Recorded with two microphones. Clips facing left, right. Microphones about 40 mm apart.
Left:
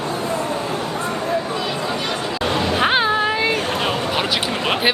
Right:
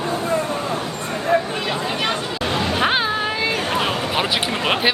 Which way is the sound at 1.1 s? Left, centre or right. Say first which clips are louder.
Right 5 dB; right.